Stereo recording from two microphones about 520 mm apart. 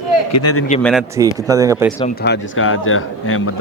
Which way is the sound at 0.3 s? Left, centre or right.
Left.